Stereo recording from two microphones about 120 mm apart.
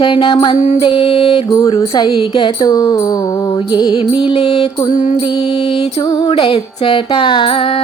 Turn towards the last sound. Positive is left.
turn(degrees=50)  # may be behind; listen again after turning